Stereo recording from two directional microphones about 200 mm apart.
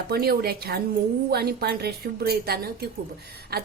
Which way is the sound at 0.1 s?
50° right (ahead or behind).